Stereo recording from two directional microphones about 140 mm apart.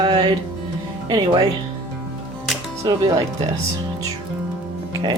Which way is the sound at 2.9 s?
30° right (ahead or behind).